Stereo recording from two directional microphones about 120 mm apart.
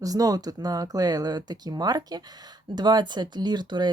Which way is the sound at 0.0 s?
30° right (ahead or behind).